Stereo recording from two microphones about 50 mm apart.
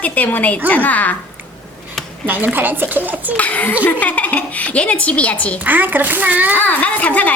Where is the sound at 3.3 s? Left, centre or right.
Left.